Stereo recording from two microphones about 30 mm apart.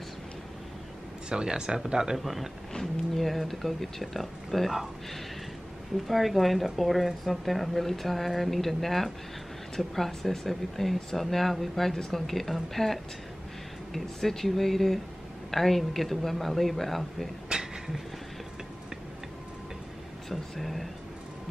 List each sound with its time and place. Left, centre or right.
1.3 s speech: right
2.1 s speech: centre
6.0 s speech: centre
17.5 s a sound: right
20.2 s speech: centre